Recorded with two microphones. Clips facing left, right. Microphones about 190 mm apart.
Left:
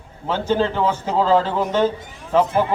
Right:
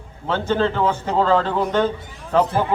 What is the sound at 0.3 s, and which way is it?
A man's voice, 10° left (ahead or behind).